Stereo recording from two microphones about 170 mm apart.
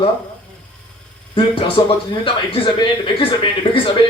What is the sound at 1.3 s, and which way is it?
A man's voice, 30° left (ahead or behind).